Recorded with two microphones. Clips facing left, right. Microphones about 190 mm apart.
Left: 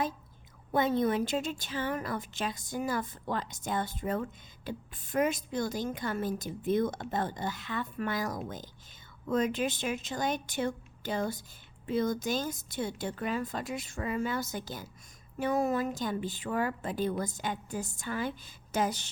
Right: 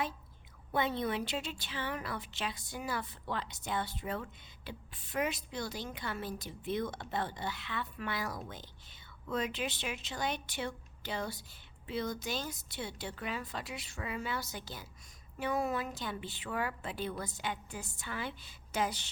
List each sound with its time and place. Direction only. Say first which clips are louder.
0.7 s a woman's voice: left 6 dB; 45° left (ahead or behind)